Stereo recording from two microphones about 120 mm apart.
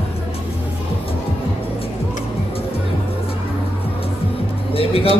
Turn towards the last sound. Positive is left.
turn(degrees=50)  # may be behind; listen again after turning